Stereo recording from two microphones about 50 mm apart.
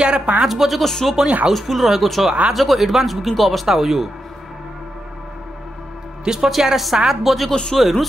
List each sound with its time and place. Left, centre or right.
0.0 s a woman's voice: centre
0.4 s speech: centre
6.2 s a woman's voice: centre